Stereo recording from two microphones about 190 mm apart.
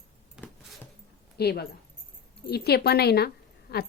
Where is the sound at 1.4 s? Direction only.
55° left (ahead or behind).